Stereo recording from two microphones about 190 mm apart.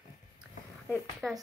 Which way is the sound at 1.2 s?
Centre (ahead or behind).